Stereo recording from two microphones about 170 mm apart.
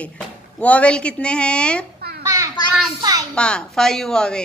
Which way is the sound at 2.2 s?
20° right (ahead or behind).